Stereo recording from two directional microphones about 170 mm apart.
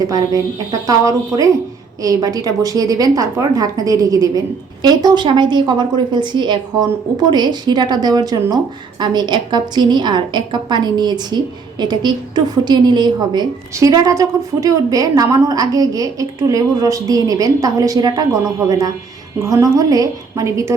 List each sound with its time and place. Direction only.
0.7 s a woman's voice: 20° right (ahead or behind)